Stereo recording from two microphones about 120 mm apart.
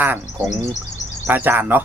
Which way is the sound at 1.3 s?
15° right (ahead or behind).